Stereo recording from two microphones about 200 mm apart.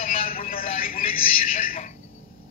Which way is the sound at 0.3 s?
45° left (ahead or behind).